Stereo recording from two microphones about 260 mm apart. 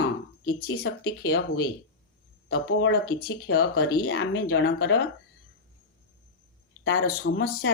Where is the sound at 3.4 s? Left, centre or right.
Left.